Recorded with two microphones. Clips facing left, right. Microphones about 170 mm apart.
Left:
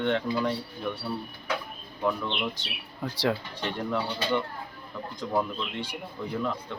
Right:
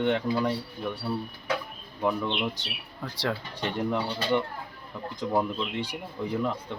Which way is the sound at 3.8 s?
20° right (ahead or behind).